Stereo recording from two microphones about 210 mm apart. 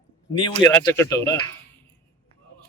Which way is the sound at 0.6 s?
10° left (ahead or behind).